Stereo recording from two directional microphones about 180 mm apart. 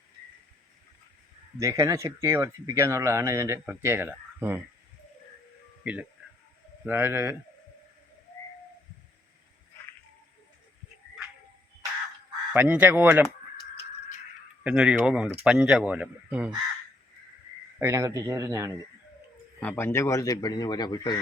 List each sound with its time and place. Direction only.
1.5 s speech: 15° right (ahead or behind)
5.8 s speech: 5° right (ahead or behind)
12.5 s speech: 10° right (ahead or behind)
14.6 s speech: 5° right (ahead or behind)
17.7 s speech: 15° right (ahead or behind)
19.5 s a man's voice: 10° left (ahead or behind)